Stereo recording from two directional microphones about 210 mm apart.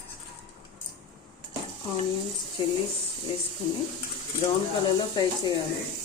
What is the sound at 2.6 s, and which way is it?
Speech, 25° left (ahead or behind).